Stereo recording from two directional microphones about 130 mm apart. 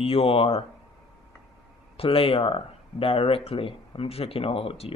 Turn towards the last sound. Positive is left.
turn(degrees=50)  # may be behind; listen again after turning